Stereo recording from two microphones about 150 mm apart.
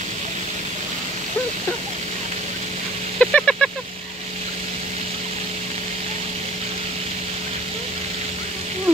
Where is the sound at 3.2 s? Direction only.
5° left (ahead or behind).